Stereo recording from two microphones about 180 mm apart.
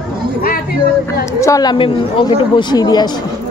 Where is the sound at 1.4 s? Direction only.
20° left (ahead or behind).